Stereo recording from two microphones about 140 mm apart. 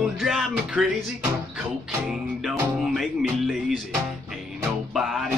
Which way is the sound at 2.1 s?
Centre (ahead or behind).